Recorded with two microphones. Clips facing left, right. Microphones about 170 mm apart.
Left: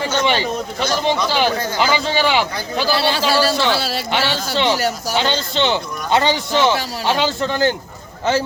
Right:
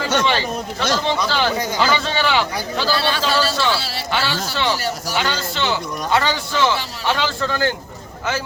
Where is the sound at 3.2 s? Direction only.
10° left (ahead or behind).